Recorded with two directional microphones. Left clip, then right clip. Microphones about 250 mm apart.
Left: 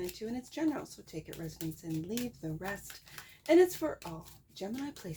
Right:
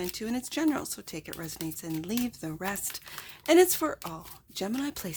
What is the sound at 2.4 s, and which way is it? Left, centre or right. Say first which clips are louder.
Speech: right 5 dB; right.